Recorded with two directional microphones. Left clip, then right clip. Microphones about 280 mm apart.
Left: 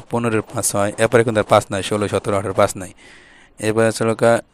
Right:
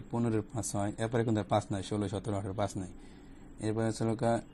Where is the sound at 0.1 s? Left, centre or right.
Left.